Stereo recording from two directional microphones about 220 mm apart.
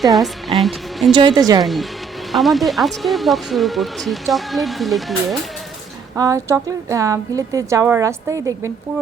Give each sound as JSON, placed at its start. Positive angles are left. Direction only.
{"t": 0.0, "sound": "speech", "side_deg": 0}
{"t": 1.1, "sound": "speech", "side_deg": -20}
{"t": 1.6, "sound": "speech", "side_deg": 0}
{"t": 6.1, "sound": "a woman's voice", "side_deg": -15}